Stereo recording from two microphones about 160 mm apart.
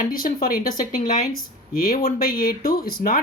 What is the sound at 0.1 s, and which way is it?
Speech, 60° left (ahead or behind).